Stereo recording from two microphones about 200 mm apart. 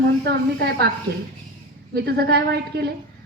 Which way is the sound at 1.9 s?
55° right (ahead or behind).